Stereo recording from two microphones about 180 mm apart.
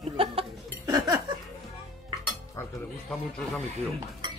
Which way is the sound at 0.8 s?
20° right (ahead or behind).